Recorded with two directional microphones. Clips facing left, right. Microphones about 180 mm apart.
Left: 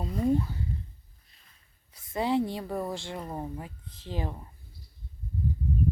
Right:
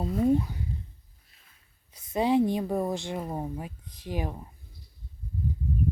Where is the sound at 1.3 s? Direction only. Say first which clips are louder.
Right 1 dB; 5° right (ahead or behind).